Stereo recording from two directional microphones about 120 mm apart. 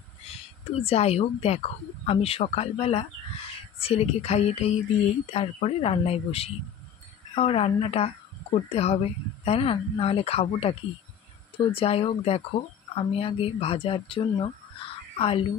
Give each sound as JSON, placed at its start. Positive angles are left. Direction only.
{"t": 0.3, "sound": "speech", "side_deg": 55}